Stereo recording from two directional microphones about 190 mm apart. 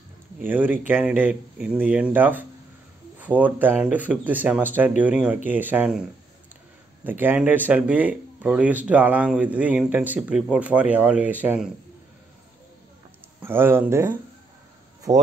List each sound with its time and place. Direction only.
0.5 s speech: 10° right (ahead or behind)
7.1 s speech: 10° right (ahead or behind)
13.4 s speech: 10° right (ahead or behind)